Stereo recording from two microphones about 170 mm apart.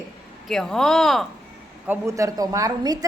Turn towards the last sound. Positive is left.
turn(degrees=-20)  # may be behind; listen again after turning